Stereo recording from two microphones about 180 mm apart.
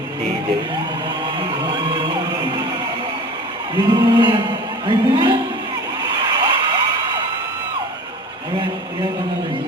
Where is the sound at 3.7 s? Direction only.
25° right (ahead or behind).